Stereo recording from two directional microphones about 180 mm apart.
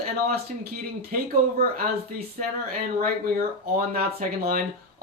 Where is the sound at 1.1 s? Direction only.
50° right (ahead or behind).